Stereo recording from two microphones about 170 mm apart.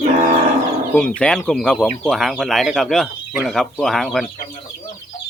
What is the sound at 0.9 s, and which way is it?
Speech, 5° left (ahead or behind).